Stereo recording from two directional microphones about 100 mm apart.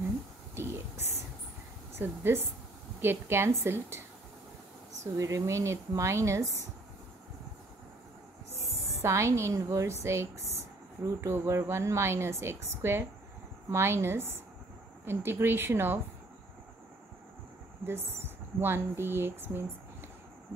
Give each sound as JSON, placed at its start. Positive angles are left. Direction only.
{"t": 0.6, "sound": "whispering", "side_deg": -25}
{"t": 2.0, "sound": "a woman's voice", "side_deg": -25}
{"t": 5.0, "sound": "speech", "side_deg": -35}
{"t": 8.7, "sound": "a woman's voice", "side_deg": -30}
{"t": 17.8, "sound": "speech", "side_deg": -25}